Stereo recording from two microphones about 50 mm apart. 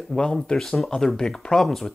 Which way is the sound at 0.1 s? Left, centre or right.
Centre.